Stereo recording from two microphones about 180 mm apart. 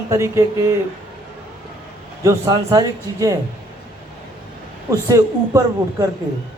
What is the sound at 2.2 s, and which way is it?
Speech, 20° right (ahead or behind).